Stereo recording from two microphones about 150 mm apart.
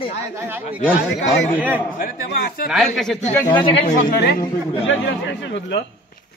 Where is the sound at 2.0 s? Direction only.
75° left (ahead or behind).